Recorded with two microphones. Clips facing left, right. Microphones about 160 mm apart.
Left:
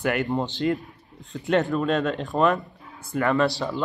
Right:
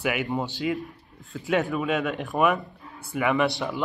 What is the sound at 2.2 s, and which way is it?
Speech, 15° right (ahead or behind).